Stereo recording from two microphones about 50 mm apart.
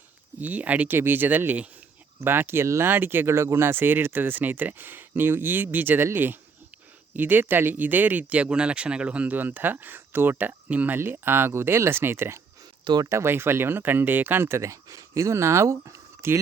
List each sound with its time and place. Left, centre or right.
0.3 s speech: right
0.9 s speech: right
3.3 s speech: right
7.2 s speech: right
9.3 s speech: right
10.3 s speech: right
10.9 s speech: right
14.4 s speech: right